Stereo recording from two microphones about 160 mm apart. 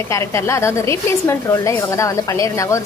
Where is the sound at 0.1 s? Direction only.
15° left (ahead or behind).